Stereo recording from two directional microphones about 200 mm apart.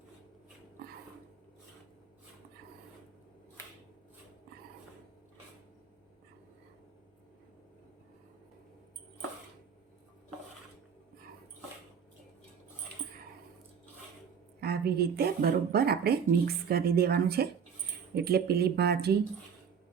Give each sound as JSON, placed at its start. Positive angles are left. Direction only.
{"t": 14.6, "sound": "speech", "side_deg": -50}